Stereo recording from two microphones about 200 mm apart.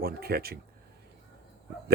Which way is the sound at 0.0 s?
50° right (ahead or behind).